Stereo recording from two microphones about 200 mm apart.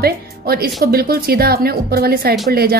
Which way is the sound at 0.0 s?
50° right (ahead or behind).